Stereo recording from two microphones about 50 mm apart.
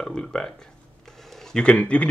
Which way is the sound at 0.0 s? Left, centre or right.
Centre.